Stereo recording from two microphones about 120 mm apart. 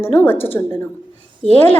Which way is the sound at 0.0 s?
20° left (ahead or behind).